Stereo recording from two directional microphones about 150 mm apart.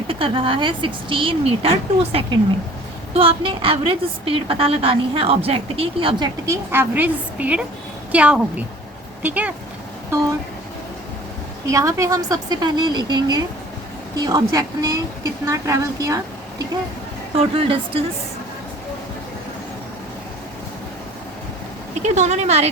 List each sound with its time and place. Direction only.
0.1 s a woman's voice: 35° right (ahead or behind); by 9.5 s 10° right (ahead or behind)
11.6 s a woman's voice: 20° right (ahead or behind)
17.3 s a woman's voice: 40° right (ahead or behind)
22.0 s a woman's voice: 50° right (ahead or behind)